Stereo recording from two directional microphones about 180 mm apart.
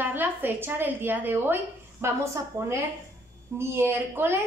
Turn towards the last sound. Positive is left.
turn(degrees=-10)  # may be behind; listen again after turning